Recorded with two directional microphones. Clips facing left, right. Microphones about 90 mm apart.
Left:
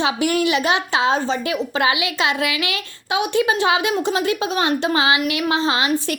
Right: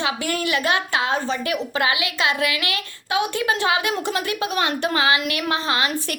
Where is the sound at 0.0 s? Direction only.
20° left (ahead or behind).